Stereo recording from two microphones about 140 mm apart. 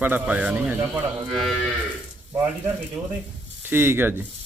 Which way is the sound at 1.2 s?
Centre (ahead or behind).